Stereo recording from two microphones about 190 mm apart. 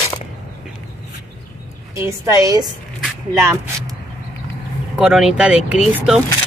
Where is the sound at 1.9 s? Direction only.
15° right (ahead or behind).